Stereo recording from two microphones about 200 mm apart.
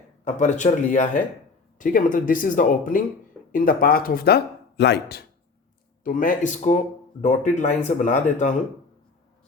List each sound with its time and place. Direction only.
0.3 s speech: 35° left (ahead or behind); by 5.2 s 55° left (ahead or behind)
6.0 s speech: 40° left (ahead or behind)